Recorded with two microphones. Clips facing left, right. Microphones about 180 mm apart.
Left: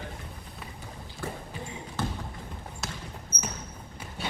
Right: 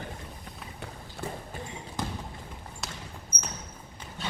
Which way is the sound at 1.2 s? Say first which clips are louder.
Even; 65° right (ahead or behind).